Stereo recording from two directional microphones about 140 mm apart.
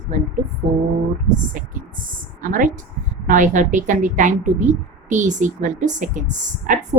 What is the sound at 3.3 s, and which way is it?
A woman's voice, 65° right (ahead or behind).